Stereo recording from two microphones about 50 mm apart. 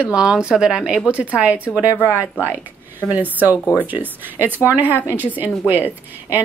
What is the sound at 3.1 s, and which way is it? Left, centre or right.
A woman's voice, right.